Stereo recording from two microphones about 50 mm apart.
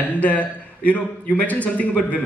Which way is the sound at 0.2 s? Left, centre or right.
Left.